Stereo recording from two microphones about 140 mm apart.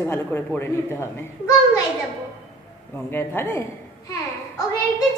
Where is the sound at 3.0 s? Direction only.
15° left (ahead or behind).